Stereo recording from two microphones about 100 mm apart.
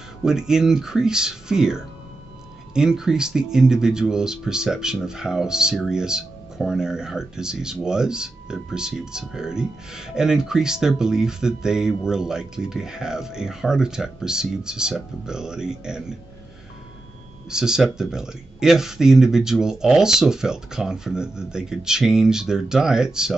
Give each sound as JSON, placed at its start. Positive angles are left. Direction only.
{"t": 0.2, "sound": "speech", "side_deg": -5}
{"t": 17.5, "sound": "speech", "side_deg": -5}